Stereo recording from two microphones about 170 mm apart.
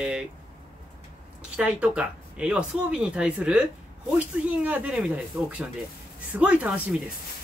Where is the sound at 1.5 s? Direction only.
5° right (ahead or behind).